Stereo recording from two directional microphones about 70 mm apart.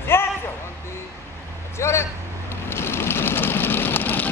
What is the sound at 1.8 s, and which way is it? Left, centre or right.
Vehicle, left.